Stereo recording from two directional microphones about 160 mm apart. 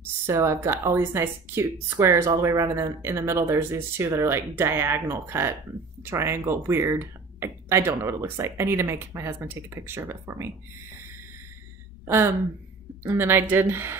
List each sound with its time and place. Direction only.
0.0 s speech: 15° right (ahead or behind)
13.0 s speech: 15° right (ahead or behind)